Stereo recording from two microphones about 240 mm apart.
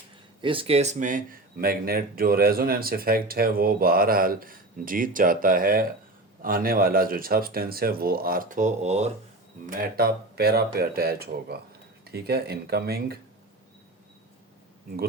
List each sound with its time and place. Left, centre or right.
0.4 s speech: right